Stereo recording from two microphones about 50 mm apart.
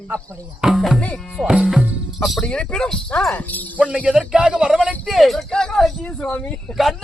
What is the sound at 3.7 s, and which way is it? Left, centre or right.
Speech, right.